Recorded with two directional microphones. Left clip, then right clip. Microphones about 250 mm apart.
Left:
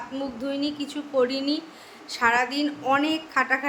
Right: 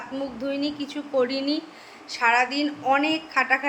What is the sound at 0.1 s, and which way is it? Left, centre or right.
A woman's voice, centre.